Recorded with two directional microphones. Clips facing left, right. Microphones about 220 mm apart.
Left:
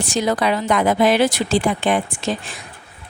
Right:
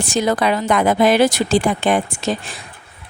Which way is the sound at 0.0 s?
50° right (ahead or behind).